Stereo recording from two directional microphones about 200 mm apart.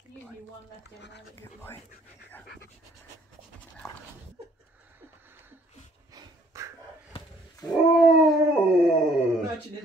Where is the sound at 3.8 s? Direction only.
15° left (ahead or behind).